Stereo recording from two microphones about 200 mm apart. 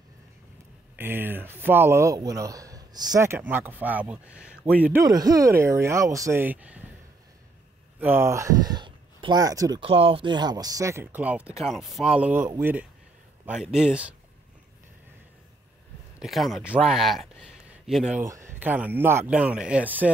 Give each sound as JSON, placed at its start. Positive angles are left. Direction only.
{"t": 0.9, "sound": "speech", "side_deg": -10}
{"t": 5.0, "sound": "speech", "side_deg": -20}
{"t": 8.0, "sound": "speech", "side_deg": -10}
{"t": 16.2, "sound": "speech", "side_deg": 0}